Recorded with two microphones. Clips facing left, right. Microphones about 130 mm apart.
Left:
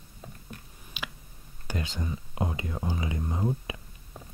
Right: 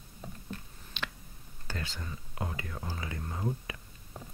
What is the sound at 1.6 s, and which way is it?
Whispering, 15° left (ahead or behind).